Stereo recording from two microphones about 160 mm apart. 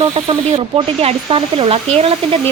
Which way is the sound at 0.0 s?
35° right (ahead or behind).